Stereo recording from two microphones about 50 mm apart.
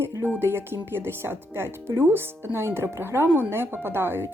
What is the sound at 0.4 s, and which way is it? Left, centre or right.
Speech, right.